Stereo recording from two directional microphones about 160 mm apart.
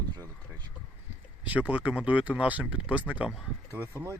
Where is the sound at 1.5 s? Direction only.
10° right (ahead or behind).